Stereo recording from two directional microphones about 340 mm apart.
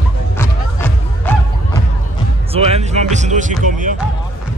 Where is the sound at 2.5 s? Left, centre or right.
Centre.